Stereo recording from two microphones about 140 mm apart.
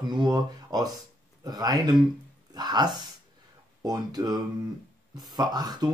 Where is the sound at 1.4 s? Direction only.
30° right (ahead or behind).